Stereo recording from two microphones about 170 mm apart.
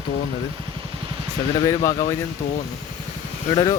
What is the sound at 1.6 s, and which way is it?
Speech, 20° left (ahead or behind).